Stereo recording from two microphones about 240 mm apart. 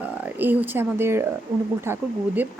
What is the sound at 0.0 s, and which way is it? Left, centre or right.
Speech, centre.